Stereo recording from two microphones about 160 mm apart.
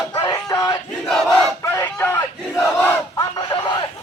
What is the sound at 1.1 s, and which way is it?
Battle cry, centre (ahead or behind).